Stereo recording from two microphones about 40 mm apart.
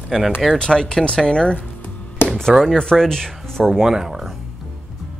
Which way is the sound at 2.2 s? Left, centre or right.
Left.